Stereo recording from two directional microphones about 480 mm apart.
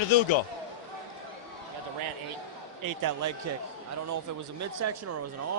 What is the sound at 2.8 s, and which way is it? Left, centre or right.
Speech, right.